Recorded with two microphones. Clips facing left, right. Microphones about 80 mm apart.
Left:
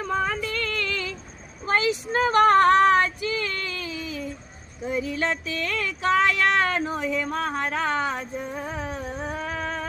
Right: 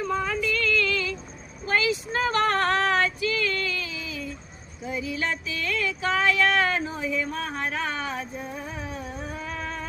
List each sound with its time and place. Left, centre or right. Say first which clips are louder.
0.2 s a sound: even; left
1.6 s female singing: left 1 dB; left
4.9 s speech: left 3 dB; left
8.6 s music: left 4 dB; left